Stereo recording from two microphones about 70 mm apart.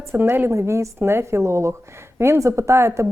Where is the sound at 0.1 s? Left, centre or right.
Right.